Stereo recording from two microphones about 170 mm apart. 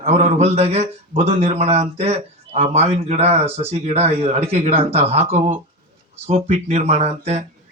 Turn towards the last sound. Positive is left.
turn(degrees=-40)  # may be behind; listen again after turning